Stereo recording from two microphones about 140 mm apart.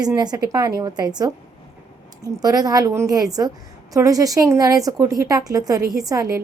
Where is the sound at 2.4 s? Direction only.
25° right (ahead or behind).